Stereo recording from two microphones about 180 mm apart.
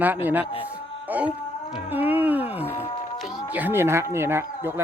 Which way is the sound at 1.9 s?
10° right (ahead or behind).